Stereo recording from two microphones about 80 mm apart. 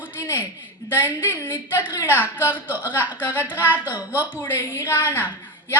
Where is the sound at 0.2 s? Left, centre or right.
Left.